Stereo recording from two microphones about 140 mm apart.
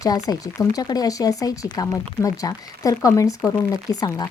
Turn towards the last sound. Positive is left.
turn(degrees=25)  # may be behind; listen again after turning